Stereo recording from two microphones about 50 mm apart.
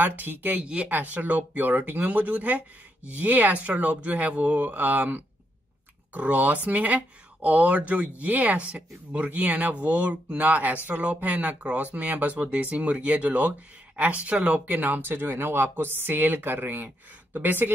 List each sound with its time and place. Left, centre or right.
0.0 s speech: right
0.6 s speech: right
0.8 s speech: right